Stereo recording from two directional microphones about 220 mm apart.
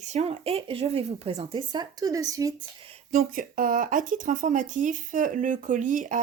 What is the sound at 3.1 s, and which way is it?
Speech, 35° right (ahead or behind).